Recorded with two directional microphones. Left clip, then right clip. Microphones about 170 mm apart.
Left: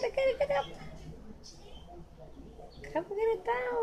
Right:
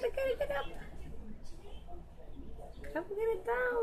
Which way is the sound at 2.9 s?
20° left (ahead or behind).